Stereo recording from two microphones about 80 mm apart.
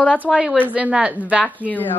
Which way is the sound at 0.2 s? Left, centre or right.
Centre.